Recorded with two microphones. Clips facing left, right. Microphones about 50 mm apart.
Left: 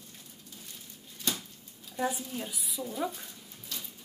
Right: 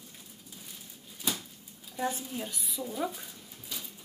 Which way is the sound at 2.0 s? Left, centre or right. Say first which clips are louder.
Left 1 dB; centre.